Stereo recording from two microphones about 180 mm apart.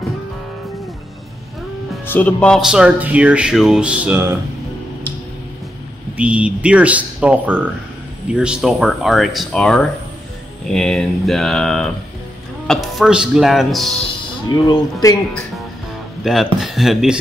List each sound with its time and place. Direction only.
2.0 s speech: 10° left (ahead or behind); by 4.4 s 15° right (ahead or behind)
6.1 s speech: 5° right (ahead or behind)
14.5 s speech: 20° left (ahead or behind)
16.5 s speech: centre (ahead or behind)